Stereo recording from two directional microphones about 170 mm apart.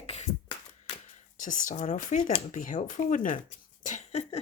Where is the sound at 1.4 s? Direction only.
50° left (ahead or behind).